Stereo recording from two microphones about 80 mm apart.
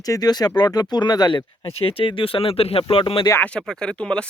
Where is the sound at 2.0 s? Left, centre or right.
Left.